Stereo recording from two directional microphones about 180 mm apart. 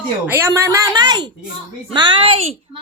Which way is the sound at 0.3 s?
15° right (ahead or behind).